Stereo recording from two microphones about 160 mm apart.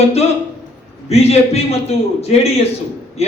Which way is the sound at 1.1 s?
40° left (ahead or behind).